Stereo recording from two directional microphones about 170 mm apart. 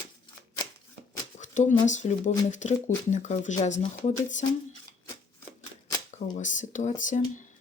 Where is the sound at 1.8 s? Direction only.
45° left (ahead or behind).